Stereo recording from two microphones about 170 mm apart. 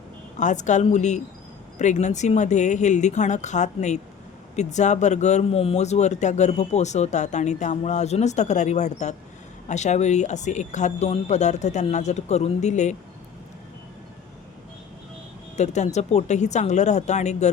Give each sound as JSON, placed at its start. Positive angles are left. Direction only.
{"t": 0.3, "sound": "speech", "side_deg": 45}
{"t": 15.5, "sound": "speech", "side_deg": 40}